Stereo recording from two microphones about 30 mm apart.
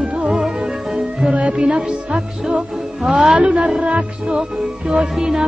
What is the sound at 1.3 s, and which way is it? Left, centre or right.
Music, right.